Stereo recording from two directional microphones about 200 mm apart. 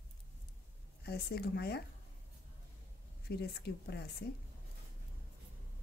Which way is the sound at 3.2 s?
55° left (ahead or behind).